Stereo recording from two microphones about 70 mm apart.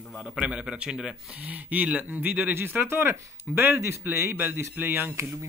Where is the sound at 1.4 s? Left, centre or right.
Right.